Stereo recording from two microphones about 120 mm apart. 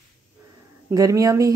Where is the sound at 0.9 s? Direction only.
30° right (ahead or behind).